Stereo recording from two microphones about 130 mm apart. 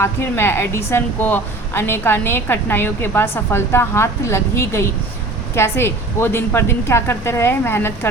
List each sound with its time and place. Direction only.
0.0 s a woman's voice: 20° left (ahead or behind)